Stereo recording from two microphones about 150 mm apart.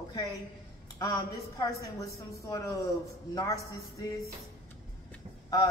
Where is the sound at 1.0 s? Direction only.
25° left (ahead or behind).